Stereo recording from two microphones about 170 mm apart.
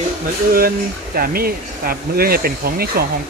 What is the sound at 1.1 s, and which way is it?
Speech, 60° right (ahead or behind).